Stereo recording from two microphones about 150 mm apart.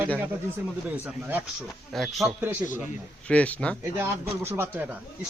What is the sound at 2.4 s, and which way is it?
Speech, 10° right (ahead or behind).